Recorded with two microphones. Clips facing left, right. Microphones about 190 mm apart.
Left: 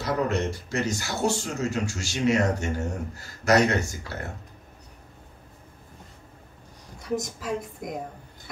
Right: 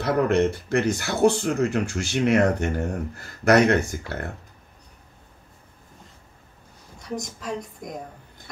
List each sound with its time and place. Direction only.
0.0 s speech: 60° right (ahead or behind)
7.0 s a woman's voice: centre (ahead or behind)